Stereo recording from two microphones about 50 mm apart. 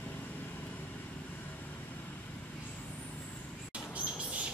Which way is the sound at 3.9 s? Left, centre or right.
Right.